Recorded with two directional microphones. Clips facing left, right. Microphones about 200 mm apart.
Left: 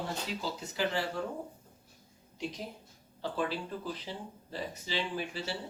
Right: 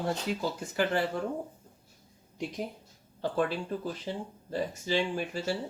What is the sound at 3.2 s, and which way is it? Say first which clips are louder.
Speech: right 4 dB; 50° right (ahead or behind).